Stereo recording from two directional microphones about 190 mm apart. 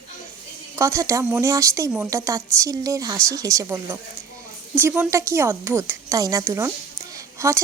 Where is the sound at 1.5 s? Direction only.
15° right (ahead or behind).